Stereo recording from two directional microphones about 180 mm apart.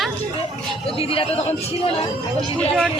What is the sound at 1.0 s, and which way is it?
Speech, 30° left (ahead or behind).